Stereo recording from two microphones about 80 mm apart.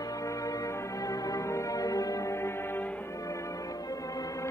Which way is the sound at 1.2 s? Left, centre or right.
Left.